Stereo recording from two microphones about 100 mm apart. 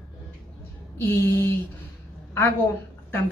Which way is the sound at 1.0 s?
20° left (ahead or behind).